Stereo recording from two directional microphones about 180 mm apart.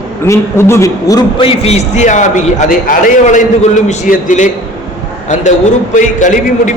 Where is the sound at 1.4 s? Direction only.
35° left (ahead or behind).